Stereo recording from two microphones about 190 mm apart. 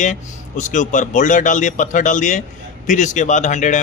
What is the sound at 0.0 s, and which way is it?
A man's voice, 40° left (ahead or behind).